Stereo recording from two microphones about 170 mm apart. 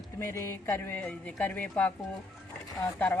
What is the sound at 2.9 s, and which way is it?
Speech, 10° left (ahead or behind).